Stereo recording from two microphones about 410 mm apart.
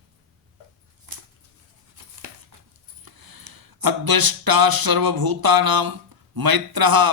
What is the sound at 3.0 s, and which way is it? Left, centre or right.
A man's voice, right.